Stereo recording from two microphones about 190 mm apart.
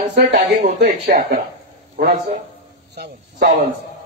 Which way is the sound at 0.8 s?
50° right (ahead or behind).